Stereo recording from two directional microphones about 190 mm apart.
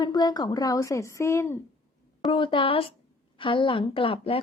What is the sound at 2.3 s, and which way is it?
A woman's voice, 25° left (ahead or behind).